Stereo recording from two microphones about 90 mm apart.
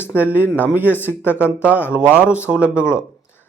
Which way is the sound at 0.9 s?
25° left (ahead or behind).